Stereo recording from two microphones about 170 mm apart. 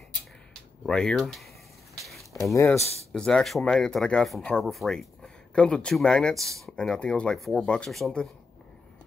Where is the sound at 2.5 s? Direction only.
15° left (ahead or behind).